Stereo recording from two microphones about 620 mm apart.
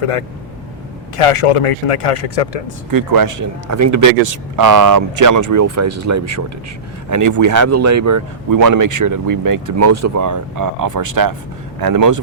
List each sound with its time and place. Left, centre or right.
0.0 s speech: left
2.9 s a man's voice: right